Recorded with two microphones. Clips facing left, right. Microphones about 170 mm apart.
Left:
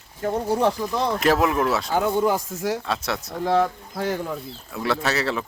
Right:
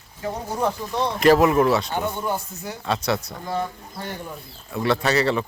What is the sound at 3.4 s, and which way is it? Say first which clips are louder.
Speech: left 10 dB; 90° left.